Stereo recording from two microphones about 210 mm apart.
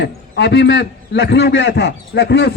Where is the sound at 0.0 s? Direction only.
55° left (ahead or behind).